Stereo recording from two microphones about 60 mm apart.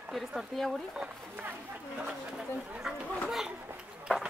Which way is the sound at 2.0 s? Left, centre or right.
Centre.